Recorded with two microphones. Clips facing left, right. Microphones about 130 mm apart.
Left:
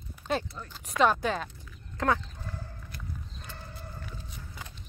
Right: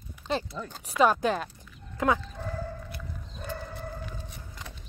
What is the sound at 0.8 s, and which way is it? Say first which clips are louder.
Speech: right 2 dB; 5° right (ahead or behind).